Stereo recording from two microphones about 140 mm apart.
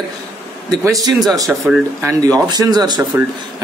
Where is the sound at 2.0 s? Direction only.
25° right (ahead or behind).